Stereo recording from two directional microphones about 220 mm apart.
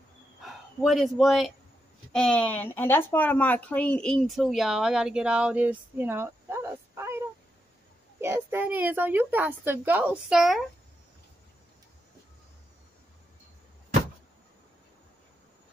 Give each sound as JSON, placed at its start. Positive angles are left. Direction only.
{"t": 0.5, "sound": "a woman's voice", "side_deg": 0}